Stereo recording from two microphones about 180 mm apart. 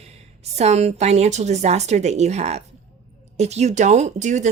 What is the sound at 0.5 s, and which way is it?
Speech, 35° right (ahead or behind).